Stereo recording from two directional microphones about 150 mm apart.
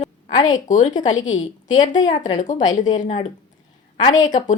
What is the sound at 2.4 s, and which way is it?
Speech, 55° left (ahead or behind).